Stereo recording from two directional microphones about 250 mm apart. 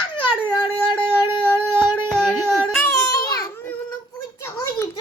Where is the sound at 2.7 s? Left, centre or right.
Centre.